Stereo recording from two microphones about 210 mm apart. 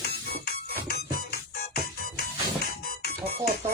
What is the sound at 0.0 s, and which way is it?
Music, 50° left (ahead or behind).